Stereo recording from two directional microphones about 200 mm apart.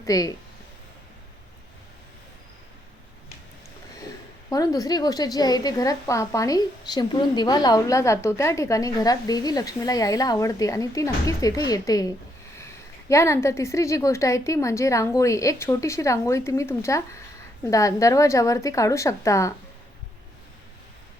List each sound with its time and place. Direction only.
0.0 s a woman's voice: 15° left (ahead or behind)
4.4 s a woman's voice: 20° left (ahead or behind)